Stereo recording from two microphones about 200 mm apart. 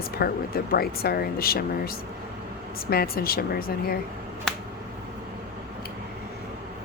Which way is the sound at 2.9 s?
50° left (ahead or behind).